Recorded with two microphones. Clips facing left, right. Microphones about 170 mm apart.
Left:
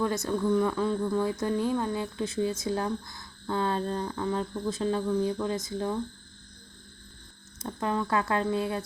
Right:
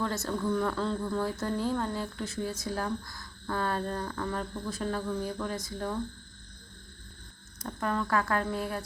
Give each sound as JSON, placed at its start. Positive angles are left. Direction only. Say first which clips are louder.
{"t": 0.0, "sound": "speech", "louder": "left 4 dB", "side_deg": 15}
{"t": 7.6, "sound": "speech", "louder": "left 2 dB", "side_deg": 20}